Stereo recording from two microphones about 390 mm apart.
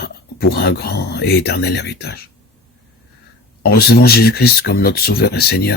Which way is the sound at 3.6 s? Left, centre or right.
Left.